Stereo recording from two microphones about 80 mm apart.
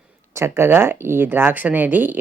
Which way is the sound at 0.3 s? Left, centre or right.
Right.